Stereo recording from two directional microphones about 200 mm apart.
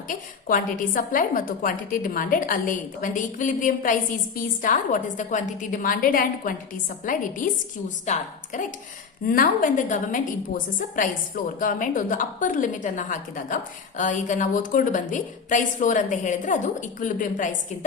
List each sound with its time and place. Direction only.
0.1 s a woman's voice: 45° left (ahead or behind)